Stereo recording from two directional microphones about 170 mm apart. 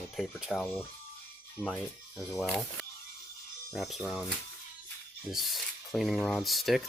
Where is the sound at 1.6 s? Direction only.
15° left (ahead or behind).